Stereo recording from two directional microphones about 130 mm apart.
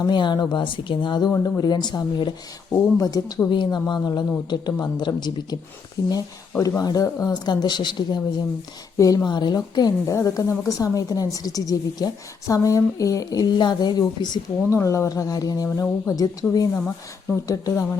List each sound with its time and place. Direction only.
0.1 s a woman's voice: 35° left (ahead or behind)
6.6 s a woman's voice: 25° left (ahead or behind)
14.7 s a woman's voice: 20° left (ahead or behind)